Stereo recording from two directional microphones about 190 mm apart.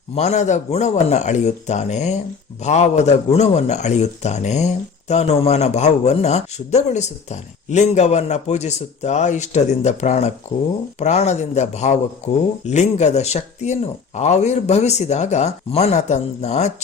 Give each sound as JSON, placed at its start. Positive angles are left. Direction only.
{"t": 0.2, "sound": "speech", "side_deg": 35}